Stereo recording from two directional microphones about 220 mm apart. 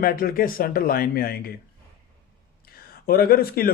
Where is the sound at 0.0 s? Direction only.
40° left (ahead or behind).